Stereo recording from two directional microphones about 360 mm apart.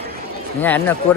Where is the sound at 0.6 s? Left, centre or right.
Centre.